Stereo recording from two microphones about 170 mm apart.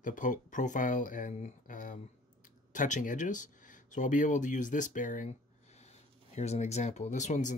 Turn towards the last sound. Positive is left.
turn(degrees=45)  # may be behind; listen again after turning